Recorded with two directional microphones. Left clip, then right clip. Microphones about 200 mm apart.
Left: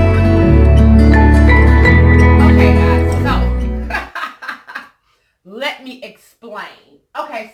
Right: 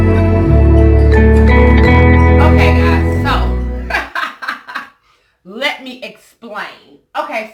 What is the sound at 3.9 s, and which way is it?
Music, centre (ahead or behind).